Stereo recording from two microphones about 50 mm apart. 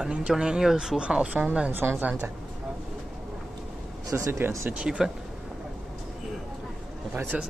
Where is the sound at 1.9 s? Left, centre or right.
Right.